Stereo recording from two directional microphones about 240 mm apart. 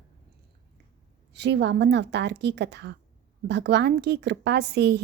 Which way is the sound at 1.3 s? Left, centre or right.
Right.